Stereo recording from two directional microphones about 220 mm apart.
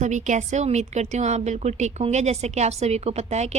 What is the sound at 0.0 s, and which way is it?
A woman's voice, 35° right (ahead or behind).